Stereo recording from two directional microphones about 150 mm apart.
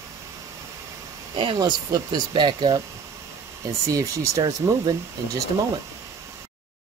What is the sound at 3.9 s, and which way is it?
Speech, 20° right (ahead or behind).